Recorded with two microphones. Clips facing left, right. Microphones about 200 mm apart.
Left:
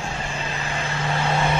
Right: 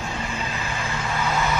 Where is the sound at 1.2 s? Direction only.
30° left (ahead or behind).